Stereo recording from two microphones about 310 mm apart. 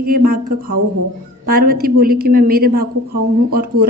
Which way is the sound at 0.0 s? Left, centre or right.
Right.